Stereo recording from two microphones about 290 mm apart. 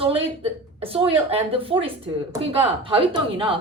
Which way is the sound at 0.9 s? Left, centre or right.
Centre.